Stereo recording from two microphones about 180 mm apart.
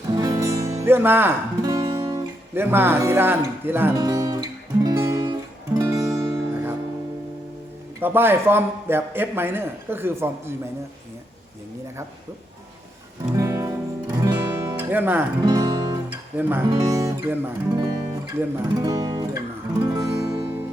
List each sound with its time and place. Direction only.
0.2 s music: 15° right (ahead or behind)
8.0 s a man's voice: 10° right (ahead or behind)
13.3 s music: 15° right (ahead or behind)
16.6 s speech: 20° right (ahead or behind)
20.0 s guitar: 20° right (ahead or behind)